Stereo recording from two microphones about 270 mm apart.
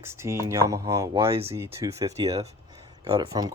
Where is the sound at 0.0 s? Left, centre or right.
Centre.